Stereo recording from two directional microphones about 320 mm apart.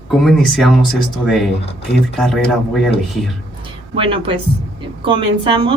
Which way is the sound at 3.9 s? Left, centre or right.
Centre.